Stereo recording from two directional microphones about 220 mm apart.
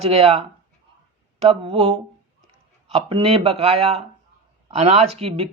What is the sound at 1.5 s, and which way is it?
Speech, 25° right (ahead or behind).